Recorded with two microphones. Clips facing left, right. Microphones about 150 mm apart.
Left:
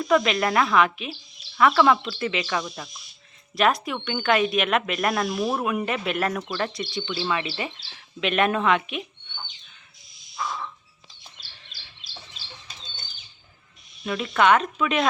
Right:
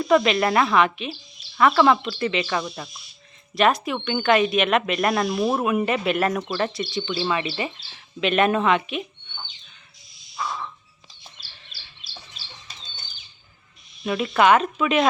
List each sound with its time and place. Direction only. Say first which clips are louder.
0.0 s speech: right 3 dB; 5° right (ahead or behind)
5.4 s speech: right 3 dB; 20° right (ahead or behind)
5.6 s speech: right 4 dB; centre (ahead or behind)
14.0 s speech: right 2 dB; 10° right (ahead or behind)